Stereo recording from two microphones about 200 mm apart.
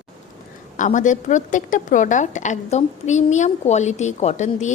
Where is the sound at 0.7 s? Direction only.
40° left (ahead or behind).